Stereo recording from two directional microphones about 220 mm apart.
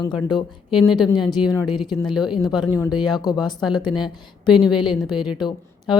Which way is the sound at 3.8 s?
20° left (ahead or behind).